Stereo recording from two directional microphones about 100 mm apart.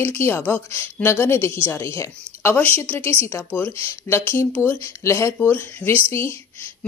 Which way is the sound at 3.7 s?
30° left (ahead or behind).